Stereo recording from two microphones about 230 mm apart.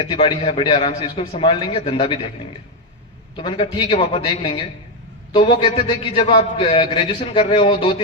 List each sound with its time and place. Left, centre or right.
0.0 s a man's voice: left
3.3 s a man's voice: left